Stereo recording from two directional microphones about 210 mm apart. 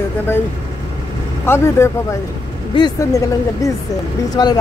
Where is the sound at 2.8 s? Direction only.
15° left (ahead or behind).